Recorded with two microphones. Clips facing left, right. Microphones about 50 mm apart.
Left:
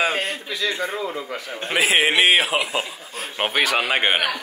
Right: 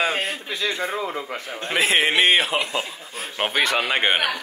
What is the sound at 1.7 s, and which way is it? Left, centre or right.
A man's voice, centre.